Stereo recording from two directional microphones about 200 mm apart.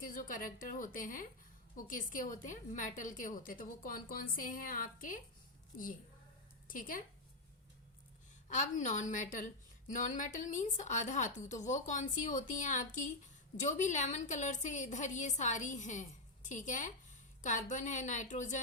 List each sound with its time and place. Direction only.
0.0 s a woman's voice: 40° left (ahead or behind)
6.7 s a woman's voice: 45° left (ahead or behind)
8.4 s a woman's voice: 40° left (ahead or behind)